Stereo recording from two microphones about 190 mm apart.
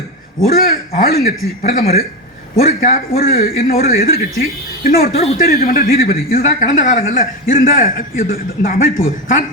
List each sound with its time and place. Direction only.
0.4 s a man's voice: 50° left (ahead or behind)